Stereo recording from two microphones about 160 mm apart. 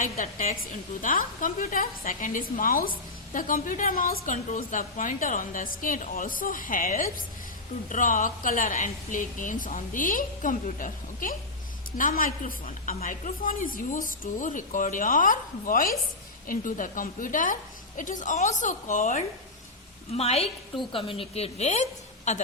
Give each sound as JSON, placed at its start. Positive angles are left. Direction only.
{"t": 0.0, "sound": "a woman's voice", "side_deg": 55}
{"t": 20.1, "sound": "a woman's voice", "side_deg": 40}